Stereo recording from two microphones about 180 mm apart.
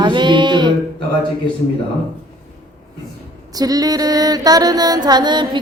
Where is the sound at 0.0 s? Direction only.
25° right (ahead or behind).